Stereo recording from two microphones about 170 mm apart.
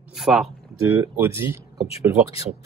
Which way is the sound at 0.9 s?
15° right (ahead or behind).